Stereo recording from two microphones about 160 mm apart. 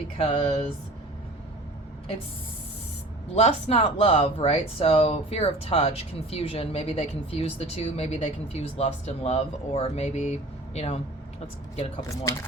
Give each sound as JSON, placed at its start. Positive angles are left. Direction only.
{"t": 0.2, "sound": "speech", "side_deg": 40}
{"t": 3.3, "sound": "speech", "side_deg": 40}
{"t": 12.0, "sound": "speech", "side_deg": 20}